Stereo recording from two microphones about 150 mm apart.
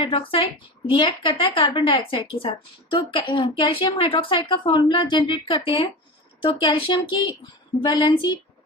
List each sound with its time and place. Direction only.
0.0 s speech: 40° left (ahead or behind)